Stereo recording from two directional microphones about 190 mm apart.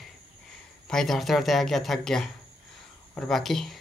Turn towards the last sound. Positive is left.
turn(degrees=0)  # may be behind; listen again after turning